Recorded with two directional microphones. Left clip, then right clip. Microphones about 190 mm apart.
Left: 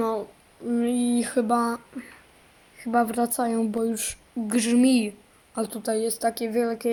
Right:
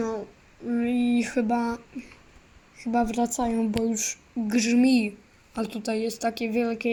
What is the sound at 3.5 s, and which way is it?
Speech, 25° left (ahead or behind).